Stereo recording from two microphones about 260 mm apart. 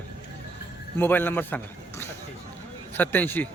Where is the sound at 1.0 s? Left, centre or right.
Centre.